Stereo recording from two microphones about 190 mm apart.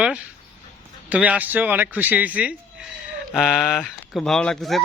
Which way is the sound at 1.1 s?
5° right (ahead or behind).